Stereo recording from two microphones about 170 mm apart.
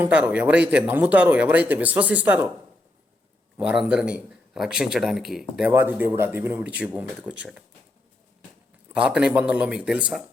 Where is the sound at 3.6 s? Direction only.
5° right (ahead or behind).